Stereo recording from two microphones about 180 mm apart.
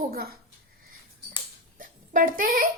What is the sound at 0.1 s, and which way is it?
Speech, 60° right (ahead or behind).